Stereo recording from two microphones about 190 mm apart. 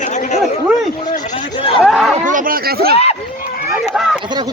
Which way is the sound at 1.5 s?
30° left (ahead or behind).